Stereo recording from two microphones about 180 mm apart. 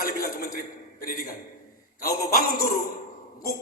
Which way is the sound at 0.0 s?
55° left (ahead or behind).